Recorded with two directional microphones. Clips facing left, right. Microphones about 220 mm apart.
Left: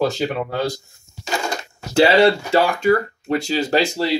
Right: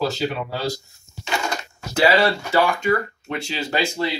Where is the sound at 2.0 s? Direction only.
25° left (ahead or behind).